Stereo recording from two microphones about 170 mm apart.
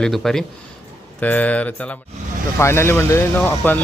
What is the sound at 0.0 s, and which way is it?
Speech, centre (ahead or behind).